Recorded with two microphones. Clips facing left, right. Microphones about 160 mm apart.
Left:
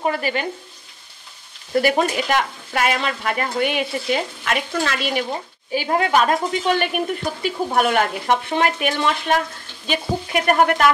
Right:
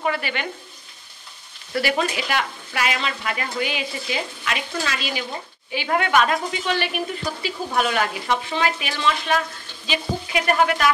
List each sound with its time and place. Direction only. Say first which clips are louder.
0.0 s speech: left 3 dB; 40° left (ahead or behind)
1.8 s speech: left 5 dB; 45° left (ahead or behind)
5.9 s speech: left 2 dB; 30° left (ahead or behind); by 10.9 s 50° left (ahead or behind)